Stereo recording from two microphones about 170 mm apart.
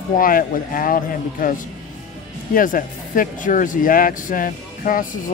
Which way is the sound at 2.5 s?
55° left (ahead or behind).